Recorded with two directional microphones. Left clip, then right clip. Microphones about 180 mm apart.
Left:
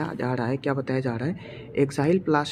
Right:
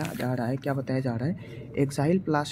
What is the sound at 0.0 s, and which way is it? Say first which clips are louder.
Speech: left 3 dB; 10° right (ahead or behind).